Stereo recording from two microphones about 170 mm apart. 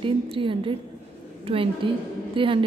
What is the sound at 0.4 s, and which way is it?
Speech, 30° right (ahead or behind).